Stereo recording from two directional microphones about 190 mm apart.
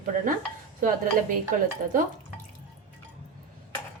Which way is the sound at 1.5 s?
45° right (ahead or behind).